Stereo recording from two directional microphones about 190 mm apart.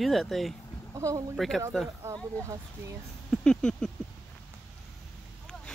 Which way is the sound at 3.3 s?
5° left (ahead or behind).